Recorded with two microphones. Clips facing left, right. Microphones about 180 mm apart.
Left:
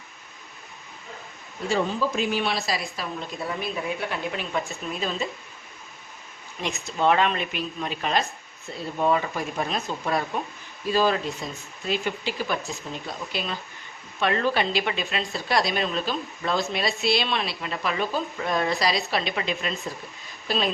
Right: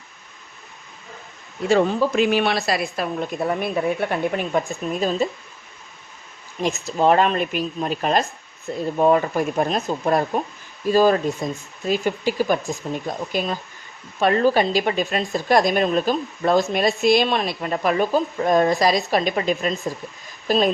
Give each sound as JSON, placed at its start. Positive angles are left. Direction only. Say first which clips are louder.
{"t": 1.7, "sound": "a woman's voice", "louder": "right 7 dB", "side_deg": -65}
{"t": 6.6, "sound": "a woman's voice", "louder": "right 5 dB", "side_deg": -40}